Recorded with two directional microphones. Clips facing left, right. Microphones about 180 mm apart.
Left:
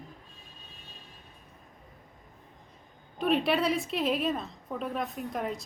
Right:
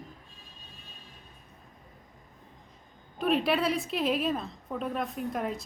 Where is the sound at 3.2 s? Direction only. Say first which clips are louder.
Even; centre (ahead or behind).